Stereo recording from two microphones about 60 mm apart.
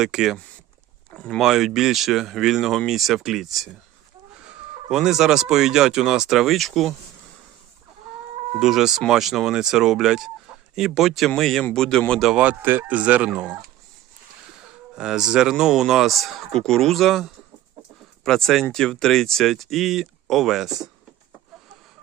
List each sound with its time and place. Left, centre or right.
0.0 s speech: centre
1.1 s speech: centre
1.4 s speech: centre
4.9 s speech: centre
8.5 s speech: centre
12.4 s speech: right
14.9 s speech: centre